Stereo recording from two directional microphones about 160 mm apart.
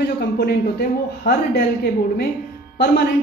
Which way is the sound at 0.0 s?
80° left.